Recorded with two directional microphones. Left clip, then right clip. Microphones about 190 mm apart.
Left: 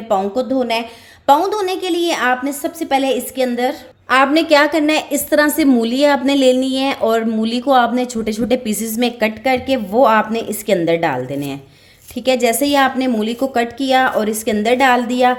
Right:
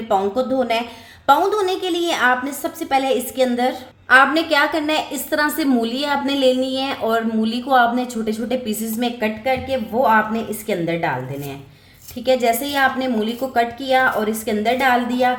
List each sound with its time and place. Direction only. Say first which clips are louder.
0.1 s a woman's voice: left 2 dB; 20° left (ahead or behind)
4.1 s a woman's voice: left 2 dB; 35° left (ahead or behind)